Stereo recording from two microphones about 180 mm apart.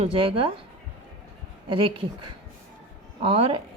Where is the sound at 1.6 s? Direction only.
30° right (ahead or behind).